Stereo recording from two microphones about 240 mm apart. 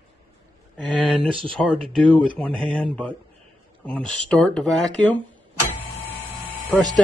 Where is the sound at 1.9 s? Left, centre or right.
Centre.